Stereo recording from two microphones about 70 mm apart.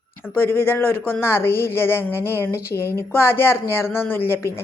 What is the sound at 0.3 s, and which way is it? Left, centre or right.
Speech, left.